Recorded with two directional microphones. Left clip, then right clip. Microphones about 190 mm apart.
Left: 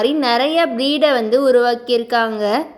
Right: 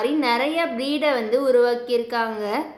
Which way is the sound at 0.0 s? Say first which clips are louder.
Left 5 dB; 30° left (ahead or behind).